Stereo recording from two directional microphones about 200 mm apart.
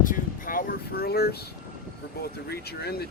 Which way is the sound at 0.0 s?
45° left (ahead or behind).